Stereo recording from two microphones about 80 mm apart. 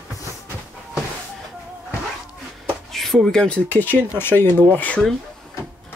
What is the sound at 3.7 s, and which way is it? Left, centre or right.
Speech, left.